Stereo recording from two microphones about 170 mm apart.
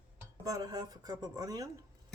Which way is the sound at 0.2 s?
20° right (ahead or behind).